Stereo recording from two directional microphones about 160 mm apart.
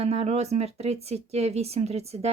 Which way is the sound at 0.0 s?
40° right (ahead or behind).